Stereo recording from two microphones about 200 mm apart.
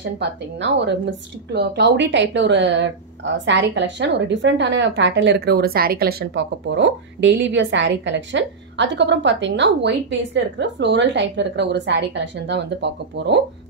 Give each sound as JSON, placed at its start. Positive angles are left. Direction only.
{"t": 0.0, "sound": "speech", "side_deg": -60}